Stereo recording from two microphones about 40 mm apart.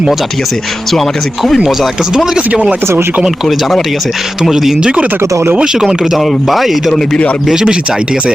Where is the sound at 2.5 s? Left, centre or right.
Right.